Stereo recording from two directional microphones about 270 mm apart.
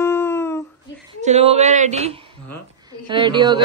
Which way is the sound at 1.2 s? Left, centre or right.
Right.